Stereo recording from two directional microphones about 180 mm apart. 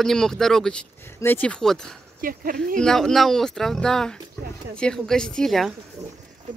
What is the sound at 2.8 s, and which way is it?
Speech, 5° left (ahead or behind).